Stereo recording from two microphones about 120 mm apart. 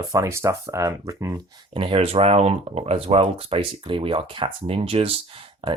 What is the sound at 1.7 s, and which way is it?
Speech, 50° right (ahead or behind).